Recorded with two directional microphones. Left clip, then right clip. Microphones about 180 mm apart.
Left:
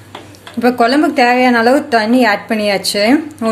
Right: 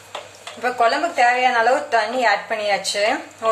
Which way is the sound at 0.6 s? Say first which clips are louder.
Left 7 dB; 50° left (ahead or behind).